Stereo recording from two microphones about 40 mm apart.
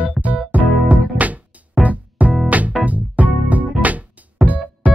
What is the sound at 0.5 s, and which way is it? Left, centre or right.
Music, right.